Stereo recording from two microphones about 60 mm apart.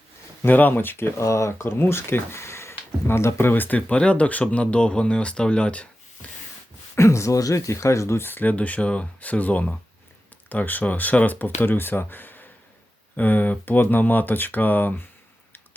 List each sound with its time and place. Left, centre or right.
0.4 s speech: left
1.2 s speech: left
3.8 s speech: centre
6.9 s speech: left